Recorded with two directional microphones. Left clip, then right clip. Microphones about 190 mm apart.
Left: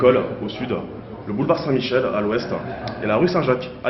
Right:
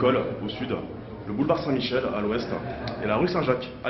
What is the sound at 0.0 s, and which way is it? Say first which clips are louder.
A man's voice: left 7 dB; 40° left (ahead or behind).